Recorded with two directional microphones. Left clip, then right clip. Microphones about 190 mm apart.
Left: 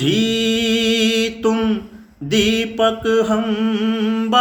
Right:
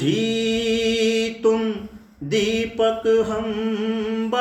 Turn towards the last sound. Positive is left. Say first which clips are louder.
# left 4 dB
turn(degrees=40)  # may be behind; listen again after turning